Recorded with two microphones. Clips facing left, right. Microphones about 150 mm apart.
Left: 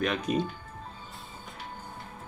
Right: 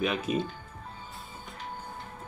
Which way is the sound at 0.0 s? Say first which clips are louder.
Left 1 dB; 5° right (ahead or behind).